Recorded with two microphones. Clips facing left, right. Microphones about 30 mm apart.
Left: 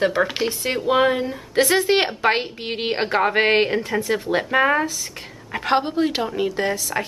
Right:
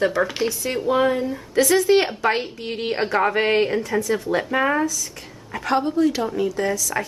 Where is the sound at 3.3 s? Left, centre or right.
Left.